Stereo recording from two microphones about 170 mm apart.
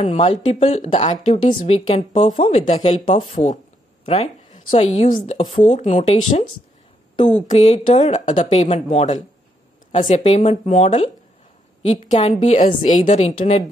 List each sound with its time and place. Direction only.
0.0 s a woman's voice: 40° left (ahead or behind)
7.4 s a woman's voice: 40° left (ahead or behind)